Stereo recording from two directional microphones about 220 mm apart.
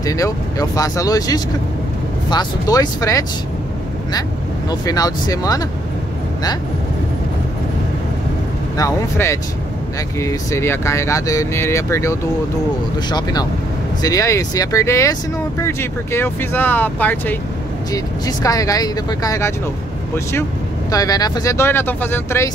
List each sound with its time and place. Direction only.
0.0 s speech: 15° left (ahead or behind)
4.6 s speech: 15° left (ahead or behind)
8.7 s speech: 15° left (ahead or behind)
20.9 s speech: 15° left (ahead or behind)